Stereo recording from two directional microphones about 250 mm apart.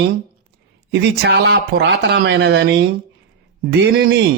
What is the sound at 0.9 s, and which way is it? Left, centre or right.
Speech, right.